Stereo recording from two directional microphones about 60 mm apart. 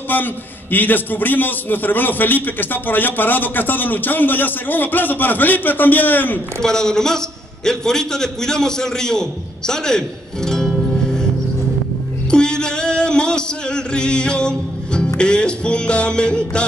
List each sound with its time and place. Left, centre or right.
0.1 s a man's voice: left
6.6 s a man's voice: centre
12.3 s music: centre
15.1 s a man's voice: centre